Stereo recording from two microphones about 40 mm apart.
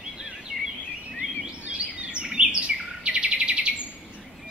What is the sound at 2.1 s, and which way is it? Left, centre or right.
Bird vocalization, right.